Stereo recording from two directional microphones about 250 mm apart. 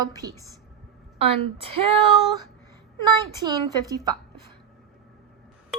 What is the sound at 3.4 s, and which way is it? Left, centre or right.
Speech, centre.